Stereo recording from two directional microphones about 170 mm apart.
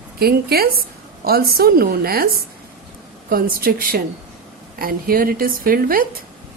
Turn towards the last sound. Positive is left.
turn(degrees=-55)  # may be behind; listen again after turning